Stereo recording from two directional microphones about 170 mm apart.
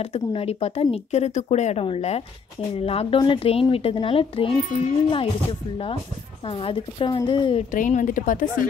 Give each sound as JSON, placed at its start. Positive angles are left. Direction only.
{"t": 0.0, "sound": "speech", "side_deg": 35}
{"t": 7.7, "sound": "a woman's voice", "side_deg": 50}